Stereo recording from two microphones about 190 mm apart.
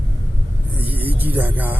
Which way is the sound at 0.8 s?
10° right (ahead or behind).